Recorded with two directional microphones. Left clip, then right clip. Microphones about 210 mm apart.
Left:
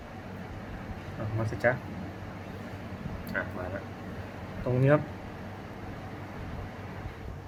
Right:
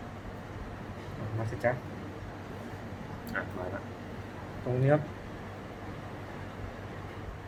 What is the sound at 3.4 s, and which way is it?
Speech, 5° left (ahead or behind).